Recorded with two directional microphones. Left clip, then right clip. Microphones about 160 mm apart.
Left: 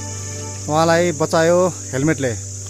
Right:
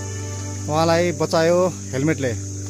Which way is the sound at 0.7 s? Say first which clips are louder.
Left 3 dB; centre (ahead or behind).